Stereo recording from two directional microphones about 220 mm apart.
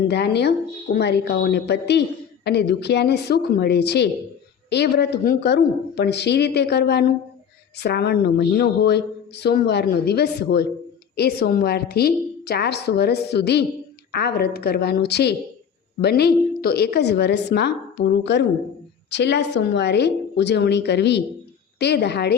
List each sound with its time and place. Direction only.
0.1 s a woman's voice: 50° left (ahead or behind)